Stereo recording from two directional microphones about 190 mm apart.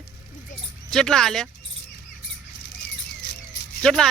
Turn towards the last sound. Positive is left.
turn(degrees=5)  # may be behind; listen again after turning